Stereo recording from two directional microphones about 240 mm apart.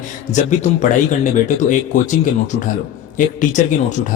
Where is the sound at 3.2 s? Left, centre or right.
Left.